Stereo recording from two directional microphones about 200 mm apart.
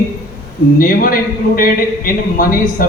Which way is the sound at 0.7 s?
45° left (ahead or behind).